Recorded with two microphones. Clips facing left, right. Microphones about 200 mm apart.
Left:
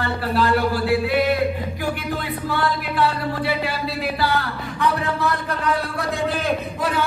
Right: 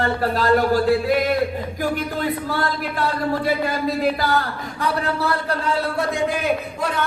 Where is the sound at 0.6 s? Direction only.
45° right (ahead or behind).